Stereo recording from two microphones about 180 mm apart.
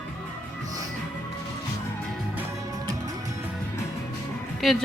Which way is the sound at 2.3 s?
15° right (ahead or behind).